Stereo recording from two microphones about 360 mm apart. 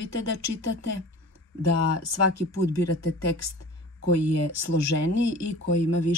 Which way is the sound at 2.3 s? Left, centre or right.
Left.